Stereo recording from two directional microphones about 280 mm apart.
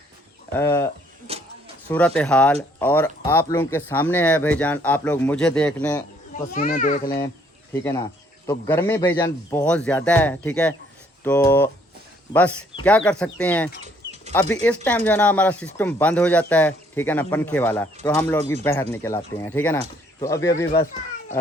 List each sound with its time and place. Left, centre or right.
0.6 s speech: centre
1.3 s a sound: right
1.9 s speech: centre
6.5 s a child's voice: left
7.7 s speech: centre